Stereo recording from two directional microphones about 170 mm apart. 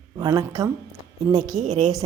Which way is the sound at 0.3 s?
20° right (ahead or behind).